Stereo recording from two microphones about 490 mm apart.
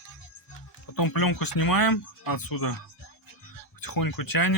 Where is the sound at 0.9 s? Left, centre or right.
Left.